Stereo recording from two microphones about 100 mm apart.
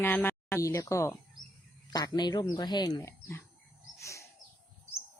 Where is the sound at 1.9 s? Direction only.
45° left (ahead or behind).